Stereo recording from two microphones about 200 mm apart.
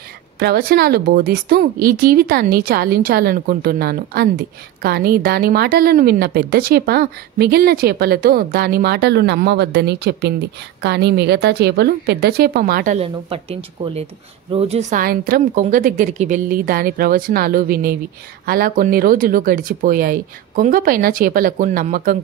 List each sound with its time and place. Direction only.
0.4 s a woman's voice: 50° right (ahead or behind)